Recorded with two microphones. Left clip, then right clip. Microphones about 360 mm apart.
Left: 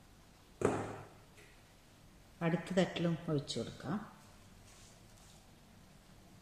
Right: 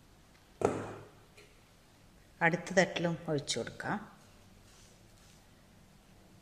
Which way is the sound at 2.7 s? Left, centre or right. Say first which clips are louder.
Right 5 dB; centre.